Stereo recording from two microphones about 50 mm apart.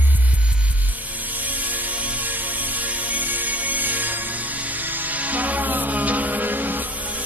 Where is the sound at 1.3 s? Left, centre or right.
Right.